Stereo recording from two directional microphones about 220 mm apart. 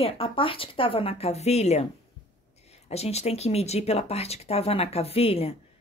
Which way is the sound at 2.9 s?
30° left (ahead or behind).